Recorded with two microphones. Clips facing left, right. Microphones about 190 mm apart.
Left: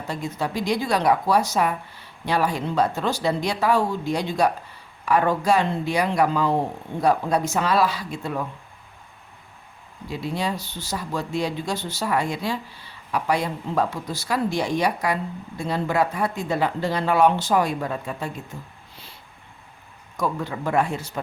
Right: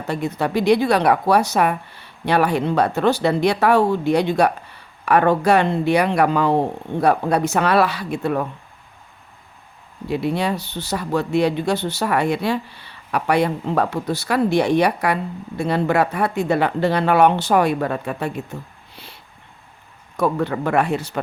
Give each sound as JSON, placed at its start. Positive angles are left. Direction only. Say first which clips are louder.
{"t": 0.1, "sound": "speech", "louder": "right 6 dB", "side_deg": -65}
{"t": 10.1, "sound": "speech", "louder": "right 6 dB", "side_deg": -65}
{"t": 18.9, "sound": "a sound", "louder": "right 5 dB", "side_deg": -70}
{"t": 20.1, "sound": "speech", "louder": "right 6 dB", "side_deg": -65}